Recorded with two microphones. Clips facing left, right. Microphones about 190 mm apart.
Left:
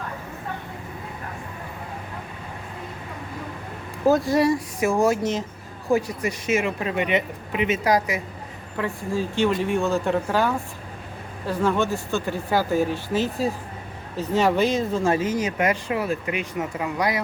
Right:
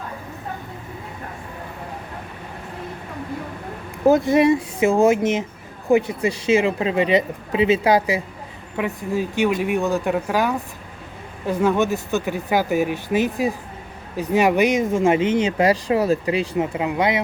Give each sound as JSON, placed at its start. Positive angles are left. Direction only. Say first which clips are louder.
{"t": 4.0, "sound": "speech", "louder": "right 4 dB", "side_deg": -20}
{"t": 8.8, "sound": "speech", "louder": "right 3 dB", "side_deg": -15}